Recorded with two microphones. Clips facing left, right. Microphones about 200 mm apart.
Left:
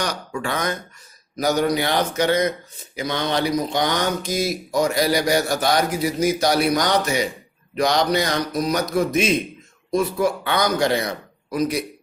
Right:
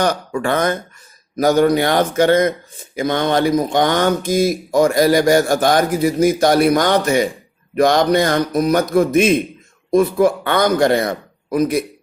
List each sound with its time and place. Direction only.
0.0 s speech: 55° right (ahead or behind)